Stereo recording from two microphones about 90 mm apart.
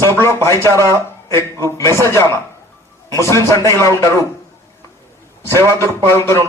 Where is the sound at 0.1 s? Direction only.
30° left (ahead or behind).